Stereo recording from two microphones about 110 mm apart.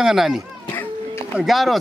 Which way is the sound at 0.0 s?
5° right (ahead or behind).